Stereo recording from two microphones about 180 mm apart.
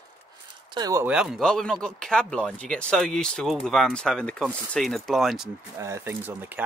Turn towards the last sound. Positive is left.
turn(degrees=-10)  # may be behind; listen again after turning